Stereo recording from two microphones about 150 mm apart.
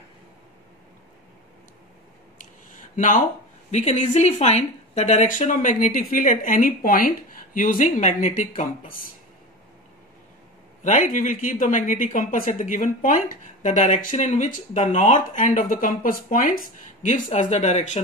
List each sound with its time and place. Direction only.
3.7 s speech: 50° left (ahead or behind)
10.8 s speech: 55° left (ahead or behind)